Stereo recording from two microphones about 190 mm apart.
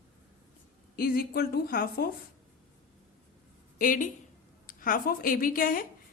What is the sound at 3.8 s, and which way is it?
A woman's voice, 45° left (ahead or behind).